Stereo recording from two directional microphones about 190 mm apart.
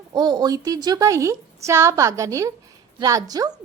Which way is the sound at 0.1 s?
20° right (ahead or behind).